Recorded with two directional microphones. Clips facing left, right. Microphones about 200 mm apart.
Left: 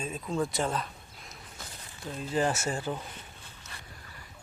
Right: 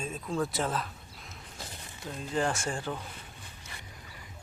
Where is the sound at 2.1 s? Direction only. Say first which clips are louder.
Left 2 dB; 5° left (ahead or behind).